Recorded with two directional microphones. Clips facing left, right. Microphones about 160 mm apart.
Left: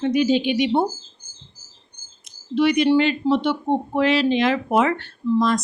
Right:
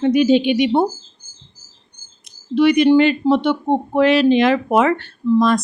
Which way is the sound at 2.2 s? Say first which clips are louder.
Right 4 dB; 55° right (ahead or behind).